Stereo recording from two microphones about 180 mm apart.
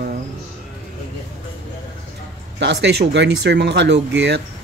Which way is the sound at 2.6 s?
80° right.